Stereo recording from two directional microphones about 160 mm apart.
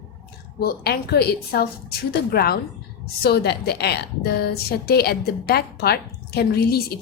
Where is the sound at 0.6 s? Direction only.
75° left (ahead or behind).